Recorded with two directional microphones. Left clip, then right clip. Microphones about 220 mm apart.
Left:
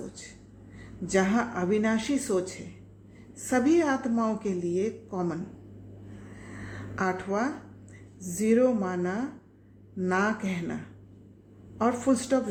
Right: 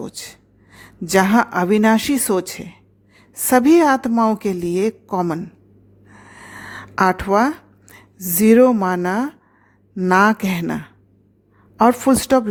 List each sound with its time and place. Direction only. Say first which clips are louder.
0.0 s a woman's voice: right 11 dB; 50° right (ahead or behind)
6.3 s a sound: right 11 dB; 50° right (ahead or behind)
8.4 s a woman's voice: right 11 dB; 50° right (ahead or behind)
11.8 s a woman's voice: right 12 dB; 50° right (ahead or behind)